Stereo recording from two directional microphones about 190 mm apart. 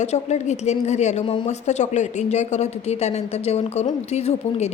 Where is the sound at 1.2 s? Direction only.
25° left (ahead or behind).